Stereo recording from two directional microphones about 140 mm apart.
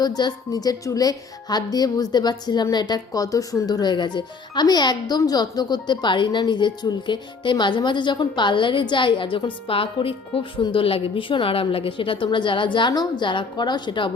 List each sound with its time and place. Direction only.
0.0 s a woman's voice: 30° left (ahead or behind)